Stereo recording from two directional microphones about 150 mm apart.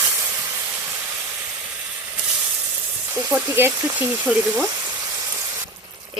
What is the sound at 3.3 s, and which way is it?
Speech, 15° right (ahead or behind).